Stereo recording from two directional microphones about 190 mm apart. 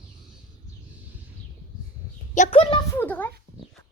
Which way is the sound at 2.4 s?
30° left (ahead or behind).